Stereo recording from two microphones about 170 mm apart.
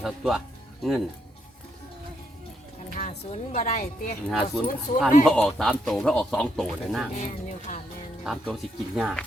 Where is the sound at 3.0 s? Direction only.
40° left (ahead or behind).